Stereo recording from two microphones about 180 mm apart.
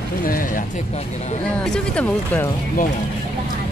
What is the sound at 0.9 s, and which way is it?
Speech, 35° left (ahead or behind).